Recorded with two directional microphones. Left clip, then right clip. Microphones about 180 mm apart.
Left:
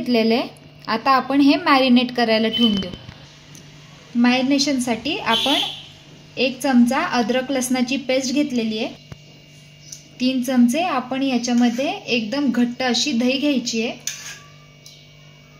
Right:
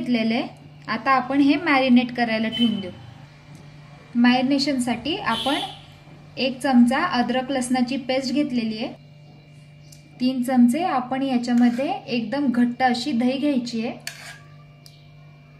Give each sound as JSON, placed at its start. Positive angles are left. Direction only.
{"t": 0.0, "sound": "a woman's voice", "side_deg": 25}
{"t": 4.2, "sound": "a woman's voice", "side_deg": 20}
{"t": 10.2, "sound": "a woman's voice", "side_deg": 20}